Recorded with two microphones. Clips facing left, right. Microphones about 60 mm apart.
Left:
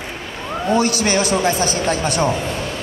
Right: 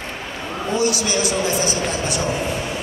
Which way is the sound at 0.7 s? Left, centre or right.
Left.